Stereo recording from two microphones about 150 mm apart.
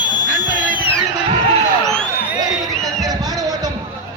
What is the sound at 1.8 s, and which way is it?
Crowd, 5° left (ahead or behind).